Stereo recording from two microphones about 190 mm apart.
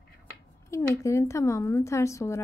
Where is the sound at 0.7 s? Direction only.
15° left (ahead or behind).